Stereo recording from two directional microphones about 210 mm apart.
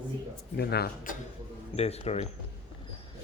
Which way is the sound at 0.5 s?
50° left (ahead or behind).